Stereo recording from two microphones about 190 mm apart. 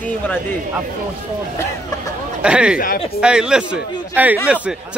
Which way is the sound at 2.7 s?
50° left (ahead or behind).